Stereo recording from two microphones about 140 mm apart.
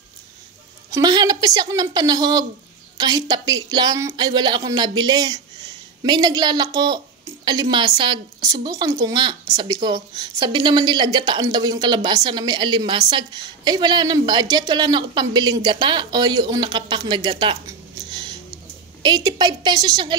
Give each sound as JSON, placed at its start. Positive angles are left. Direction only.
{"t": 0.8, "sound": "a woman's voice", "side_deg": -25}